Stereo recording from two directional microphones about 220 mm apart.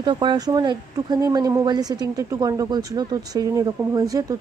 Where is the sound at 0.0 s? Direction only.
20° right (ahead or behind).